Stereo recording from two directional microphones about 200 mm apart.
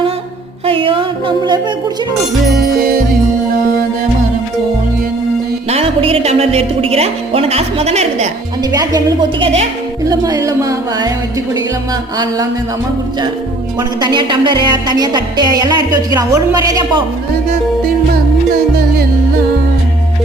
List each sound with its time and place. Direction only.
0.6 s music: 25° right (ahead or behind)
5.6 s speech: 30° right (ahead or behind)
8.7 s music: 20° right (ahead or behind)
12.1 s music: 20° right (ahead or behind)
13.7 s music: 20° right (ahead or behind)